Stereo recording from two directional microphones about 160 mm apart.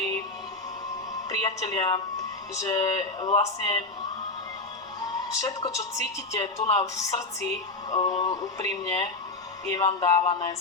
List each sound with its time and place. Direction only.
1.3 s music: 25° left (ahead or behind)
2.6 s a woman's voice: 25° left (ahead or behind)
5.4 s a woman's voice: 20° left (ahead or behind)